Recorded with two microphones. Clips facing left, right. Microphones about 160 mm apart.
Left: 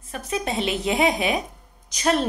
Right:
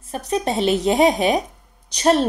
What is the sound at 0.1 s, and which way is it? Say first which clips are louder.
Speech: right 5 dB; 35° right (ahead or behind).